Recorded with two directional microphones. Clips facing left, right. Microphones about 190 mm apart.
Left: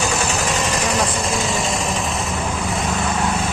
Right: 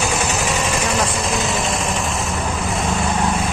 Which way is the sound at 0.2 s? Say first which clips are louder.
Even; 10° right (ahead or behind).